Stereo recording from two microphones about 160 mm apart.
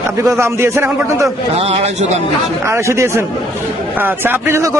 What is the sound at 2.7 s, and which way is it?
A man's voice, 15° right (ahead or behind).